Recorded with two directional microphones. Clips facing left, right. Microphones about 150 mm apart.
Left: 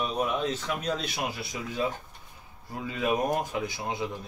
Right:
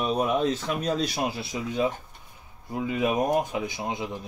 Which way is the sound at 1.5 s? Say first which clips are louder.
Right 5 dB; 25° right (ahead or behind).